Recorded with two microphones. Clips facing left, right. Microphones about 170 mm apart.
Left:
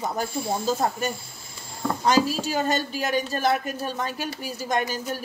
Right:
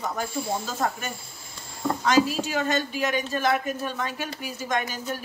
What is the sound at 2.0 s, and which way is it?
A woman's voice, 35° left (ahead or behind).